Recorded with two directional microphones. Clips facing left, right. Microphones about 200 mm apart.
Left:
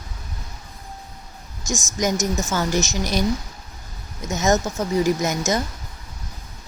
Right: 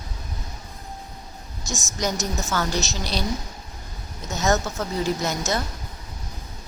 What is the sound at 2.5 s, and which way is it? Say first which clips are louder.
A woman's voice: left 3 dB; 15° left (ahead or behind).